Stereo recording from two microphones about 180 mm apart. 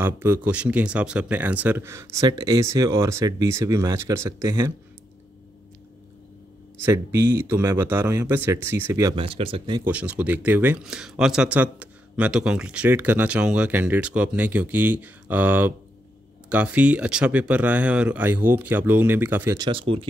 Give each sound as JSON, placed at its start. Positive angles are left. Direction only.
{"t": 0.0, "sound": "speech", "side_deg": -10}
{"t": 6.8, "sound": "speech", "side_deg": -15}
{"t": 9.1, "sound": "speech", "side_deg": -30}
{"t": 9.8, "sound": "speech", "side_deg": -10}